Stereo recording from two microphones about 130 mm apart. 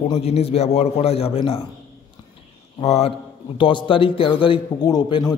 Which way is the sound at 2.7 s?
55° left (ahead or behind).